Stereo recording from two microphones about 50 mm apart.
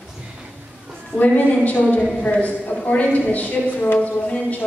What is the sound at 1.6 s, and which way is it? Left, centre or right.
A woman's voice, left.